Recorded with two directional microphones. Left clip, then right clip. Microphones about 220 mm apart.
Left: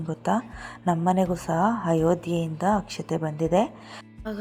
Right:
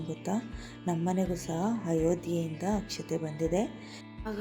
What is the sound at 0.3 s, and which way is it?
A woman's voice, 20° left (ahead or behind).